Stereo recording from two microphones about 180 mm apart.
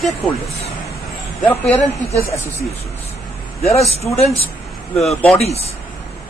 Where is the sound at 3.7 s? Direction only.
35° left (ahead or behind).